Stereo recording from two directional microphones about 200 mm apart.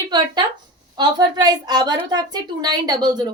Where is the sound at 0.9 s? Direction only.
20° right (ahead or behind).